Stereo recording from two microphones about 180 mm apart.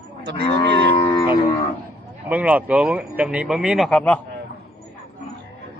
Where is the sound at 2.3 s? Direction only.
10° right (ahead or behind).